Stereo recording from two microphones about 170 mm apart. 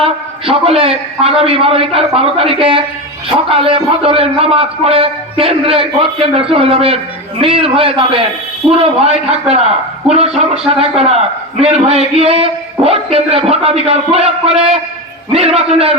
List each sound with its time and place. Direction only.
0.0 s a man's voice: 35° right (ahead or behind)